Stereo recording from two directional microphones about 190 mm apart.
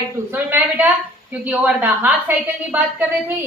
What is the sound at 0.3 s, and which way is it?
A woman's voice, 10° right (ahead or behind).